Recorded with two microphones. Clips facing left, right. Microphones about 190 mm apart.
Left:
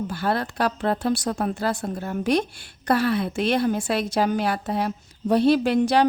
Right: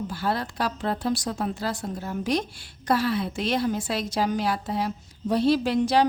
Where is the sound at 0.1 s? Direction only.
60° left (ahead or behind).